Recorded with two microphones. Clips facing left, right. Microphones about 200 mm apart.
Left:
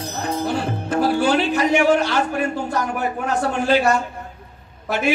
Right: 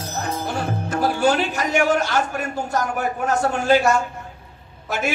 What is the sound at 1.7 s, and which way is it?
A woman's voice, 45° right (ahead or behind).